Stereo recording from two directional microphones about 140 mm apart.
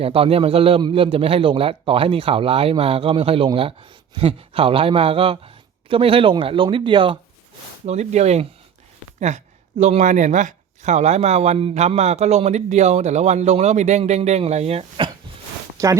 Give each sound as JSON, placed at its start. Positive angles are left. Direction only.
{"t": 0.0, "sound": "a man's voice", "side_deg": -45}
{"t": 7.9, "sound": "speech", "side_deg": -55}
{"t": 15.8, "sound": "speech", "side_deg": -20}